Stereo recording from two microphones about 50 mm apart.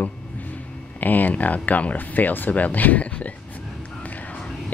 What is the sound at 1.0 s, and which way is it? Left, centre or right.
Speech, left.